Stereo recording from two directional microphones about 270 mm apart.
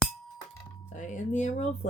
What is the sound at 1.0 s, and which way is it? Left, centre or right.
Speech, left.